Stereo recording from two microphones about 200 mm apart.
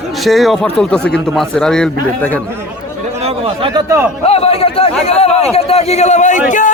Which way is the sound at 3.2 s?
25° right (ahead or behind).